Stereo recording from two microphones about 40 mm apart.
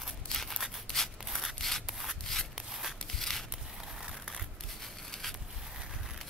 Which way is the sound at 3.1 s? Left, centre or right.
Centre.